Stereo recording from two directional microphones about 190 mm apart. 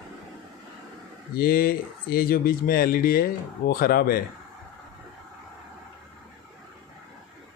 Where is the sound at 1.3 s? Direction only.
50° left (ahead or behind).